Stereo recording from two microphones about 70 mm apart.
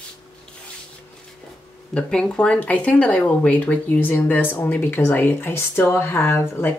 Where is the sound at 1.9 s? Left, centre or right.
Centre.